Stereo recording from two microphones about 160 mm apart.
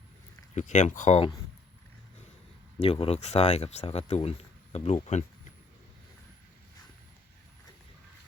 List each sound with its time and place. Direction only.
0.5 s speech: 50° left (ahead or behind)
2.7 s speech: 40° left (ahead or behind)